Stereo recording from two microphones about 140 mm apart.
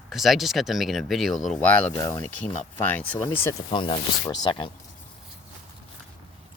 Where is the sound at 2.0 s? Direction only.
25° left (ahead or behind).